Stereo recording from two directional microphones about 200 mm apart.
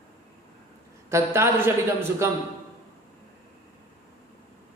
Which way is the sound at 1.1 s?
10° right (ahead or behind).